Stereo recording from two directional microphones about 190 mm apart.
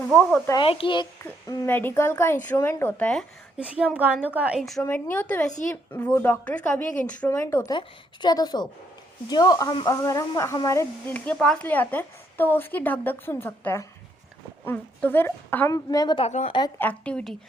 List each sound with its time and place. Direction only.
0.1 s a woman's voice: centre (ahead or behind)
0.6 s a woman's voice: 30° left (ahead or behind)
1.2 s a woman's voice: 10° left (ahead or behind)
3.6 s a woman's voice: 5° right (ahead or behind)
4.8 s a woman's voice: 10° left (ahead or behind); by 16.5 s 35° left (ahead or behind)
16.5 s a woman's voice: 25° left (ahead or behind)
16.7 s a woman's voice: 10° left (ahead or behind)